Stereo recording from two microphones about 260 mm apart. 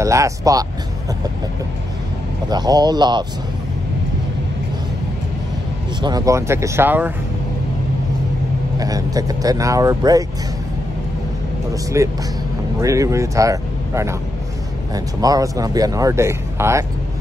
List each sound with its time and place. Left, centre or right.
0.0 s speech: centre
2.5 s speech: centre
6.0 s speech: centre
8.7 s speech: centre
11.7 s speech: centre
15.1 s speech: centre